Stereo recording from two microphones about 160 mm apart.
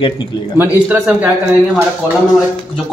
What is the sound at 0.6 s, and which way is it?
Speech, 10° right (ahead or behind).